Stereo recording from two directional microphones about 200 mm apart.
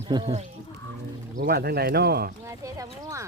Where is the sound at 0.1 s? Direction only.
20° right (ahead or behind).